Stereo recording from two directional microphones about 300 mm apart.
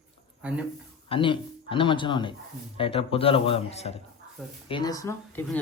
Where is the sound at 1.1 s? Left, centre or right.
Centre.